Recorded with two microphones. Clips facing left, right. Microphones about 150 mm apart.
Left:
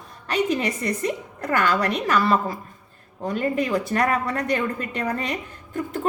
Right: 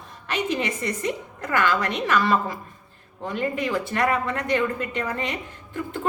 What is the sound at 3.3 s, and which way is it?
A woman's voice, 40° left (ahead or behind).